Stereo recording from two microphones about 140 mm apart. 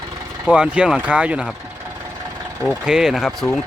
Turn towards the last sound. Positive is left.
turn(degrees=0)  # may be behind; listen again after turning